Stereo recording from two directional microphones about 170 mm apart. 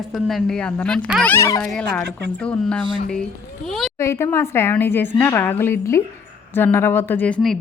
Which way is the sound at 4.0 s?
15° left (ahead or behind).